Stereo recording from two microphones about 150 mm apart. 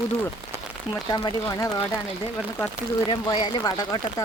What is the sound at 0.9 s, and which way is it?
Speech, 25° left (ahead or behind).